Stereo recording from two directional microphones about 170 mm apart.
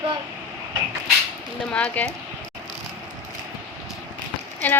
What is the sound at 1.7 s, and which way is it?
Speech, 5° left (ahead or behind).